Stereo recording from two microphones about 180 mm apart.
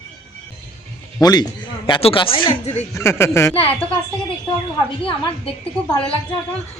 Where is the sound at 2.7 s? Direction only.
15° left (ahead or behind).